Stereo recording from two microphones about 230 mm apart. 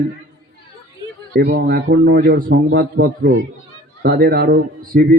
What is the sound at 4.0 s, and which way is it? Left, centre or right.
A man's voice, right.